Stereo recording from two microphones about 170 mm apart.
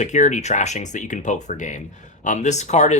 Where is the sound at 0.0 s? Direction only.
45° left (ahead or behind).